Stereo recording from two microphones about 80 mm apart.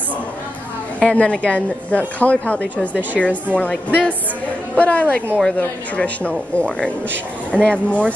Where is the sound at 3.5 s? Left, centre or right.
Centre.